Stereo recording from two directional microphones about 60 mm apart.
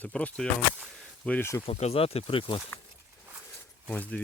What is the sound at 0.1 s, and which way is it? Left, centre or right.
Speech, centre.